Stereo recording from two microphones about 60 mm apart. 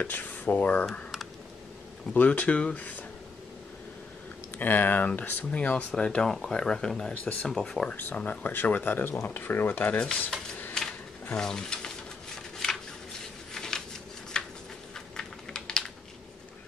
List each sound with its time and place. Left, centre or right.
0.0 s speech: left
2.1 s speech: left
4.6 s speech: left; by 7.9 s centre
7.9 s speech: left
9.9 s speech: centre
10.7 s drawer open or close: centre
11.3 s speech: centre
12.6 s a sound: centre
15.1 s typing: centre